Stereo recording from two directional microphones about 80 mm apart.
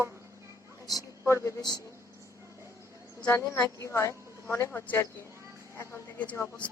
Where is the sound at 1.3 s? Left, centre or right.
Left.